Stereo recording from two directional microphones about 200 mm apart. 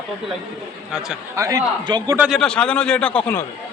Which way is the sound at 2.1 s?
5° right (ahead or behind).